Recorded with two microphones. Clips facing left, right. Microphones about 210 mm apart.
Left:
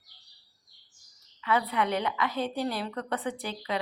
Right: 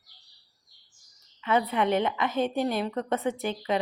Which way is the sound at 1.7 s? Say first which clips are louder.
Right 4 dB; 20° right (ahead or behind).